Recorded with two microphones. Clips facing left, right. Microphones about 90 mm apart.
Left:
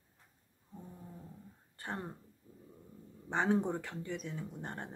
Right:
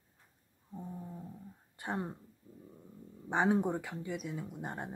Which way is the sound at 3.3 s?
15° right (ahead or behind).